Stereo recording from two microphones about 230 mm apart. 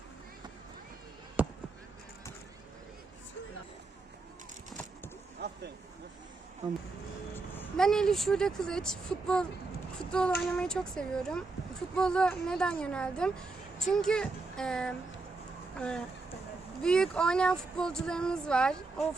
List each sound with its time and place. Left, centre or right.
1.4 s basketball bounce: centre
5.4 s a sound: right
7.3 s speech: centre
10.1 s child singing: centre
10.4 s speech: centre